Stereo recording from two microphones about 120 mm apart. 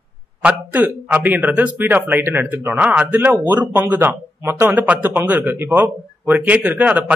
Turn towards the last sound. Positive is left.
turn(degrees=-10)  # may be behind; listen again after turning